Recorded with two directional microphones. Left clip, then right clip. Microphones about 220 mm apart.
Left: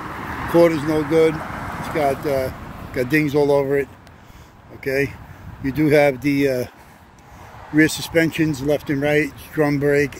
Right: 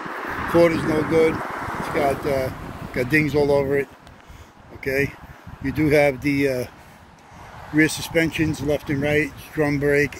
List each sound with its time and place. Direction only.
0.0 s vehicle: 55° left (ahead or behind)
0.6 s speech: 20° left (ahead or behind)
1.3 s vehicle: 40° left (ahead or behind)
2.0 s speech: 15° left (ahead or behind)
7.7 s speech: 25° left (ahead or behind)